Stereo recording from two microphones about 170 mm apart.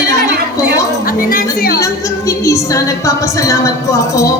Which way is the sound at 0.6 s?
20° left (ahead or behind).